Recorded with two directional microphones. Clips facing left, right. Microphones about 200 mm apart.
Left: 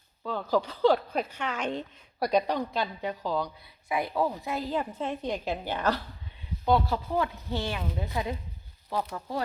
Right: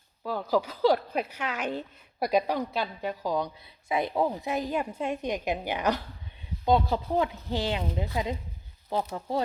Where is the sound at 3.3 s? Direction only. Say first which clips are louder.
Right 1 dB; 20° right (ahead or behind).